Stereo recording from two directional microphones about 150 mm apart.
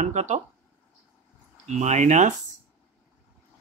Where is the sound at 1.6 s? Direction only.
50° right (ahead or behind).